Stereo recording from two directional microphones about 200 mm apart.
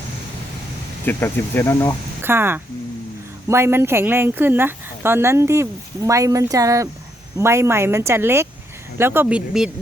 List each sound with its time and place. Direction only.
1.0 s speech: 10° left (ahead or behind)
2.2 s speech: 10° right (ahead or behind)